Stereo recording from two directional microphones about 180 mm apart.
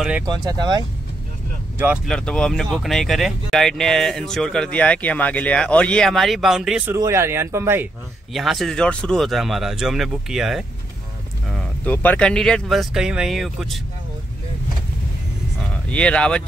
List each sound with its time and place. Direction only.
0.3 s speech: 25° right (ahead or behind)
2.0 s speech: 5° left (ahead or behind)
6.9 s speech: 15° right (ahead or behind)
8.3 s speech: centre (ahead or behind)
15.9 s speech: 5° left (ahead or behind)